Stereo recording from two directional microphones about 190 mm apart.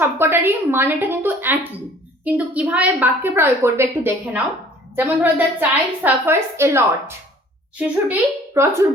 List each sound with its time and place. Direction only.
0.0 s a woman's voice: 10° right (ahead or behind)